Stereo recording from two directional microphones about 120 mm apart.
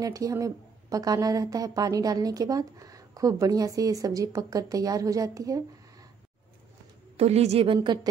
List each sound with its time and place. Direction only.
0.0 s a woman's voice: 30° right (ahead or behind)
7.2 s a woman's voice: 60° right (ahead or behind); by 8.1 s 40° right (ahead or behind)